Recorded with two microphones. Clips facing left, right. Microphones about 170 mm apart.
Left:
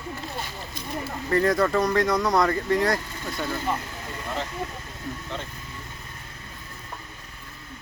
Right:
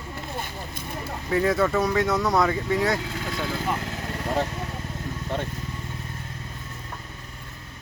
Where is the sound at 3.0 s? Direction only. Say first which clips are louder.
Right 3 dB; 90° right.